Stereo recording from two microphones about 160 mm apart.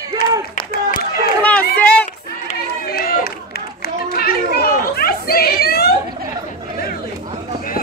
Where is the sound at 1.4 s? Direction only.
10° left (ahead or behind).